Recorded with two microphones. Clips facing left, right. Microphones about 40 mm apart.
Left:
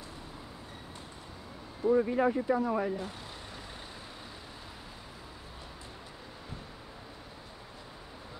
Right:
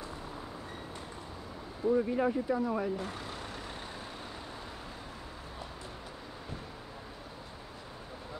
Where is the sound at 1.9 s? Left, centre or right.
Centre.